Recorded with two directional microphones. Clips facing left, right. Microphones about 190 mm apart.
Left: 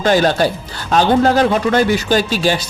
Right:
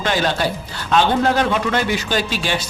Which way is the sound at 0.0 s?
45° left (ahead or behind).